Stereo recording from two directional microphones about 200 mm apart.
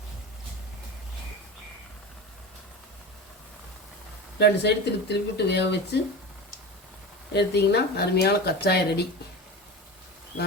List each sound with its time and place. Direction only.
4.4 s speech: 55° left (ahead or behind)
7.3 s speech: 55° left (ahead or behind)